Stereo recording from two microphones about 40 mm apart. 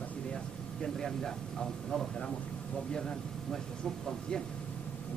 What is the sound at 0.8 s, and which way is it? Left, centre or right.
A man's voice, centre.